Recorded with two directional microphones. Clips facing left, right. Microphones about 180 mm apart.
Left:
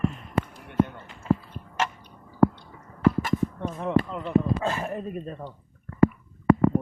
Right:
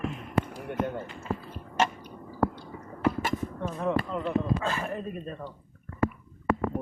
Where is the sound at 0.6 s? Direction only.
45° right (ahead or behind).